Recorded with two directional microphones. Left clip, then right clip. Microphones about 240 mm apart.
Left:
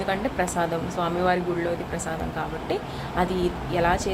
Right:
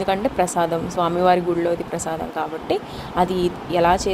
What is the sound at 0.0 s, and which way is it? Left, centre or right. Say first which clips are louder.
Speech: right 5 dB; right.